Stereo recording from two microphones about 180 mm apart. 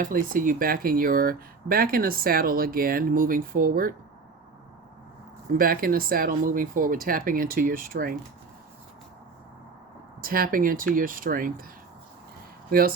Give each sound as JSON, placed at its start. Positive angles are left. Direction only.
{"t": 0.0, "sound": "speech", "side_deg": -50}
{"t": 5.5, "sound": "speech", "side_deg": -55}
{"t": 10.2, "sound": "speech", "side_deg": -55}
{"t": 12.7, "sound": "speech", "side_deg": -55}